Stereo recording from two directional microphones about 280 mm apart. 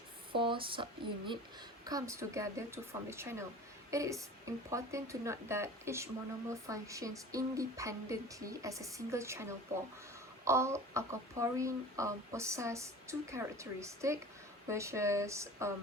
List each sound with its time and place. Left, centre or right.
0.3 s speech: centre